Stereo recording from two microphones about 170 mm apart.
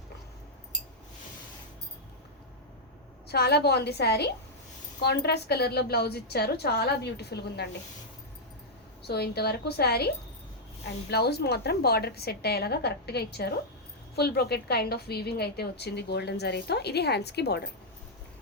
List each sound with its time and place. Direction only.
3.2 s a woman's voice: 70° left (ahead or behind)
9.0 s a woman's voice: 70° left (ahead or behind)
11.1 s a woman's voice: 70° left (ahead or behind)